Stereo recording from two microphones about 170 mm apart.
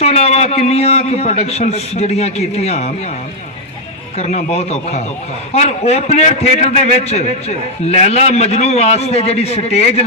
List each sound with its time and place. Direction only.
0.0 s a man's voice: 40° left (ahead or behind)
4.2 s a man's voice: 40° left (ahead or behind)